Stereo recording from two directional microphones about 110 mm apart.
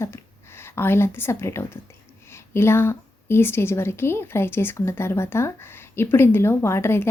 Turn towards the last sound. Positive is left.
turn(degrees=20)  # may be behind; listen again after turning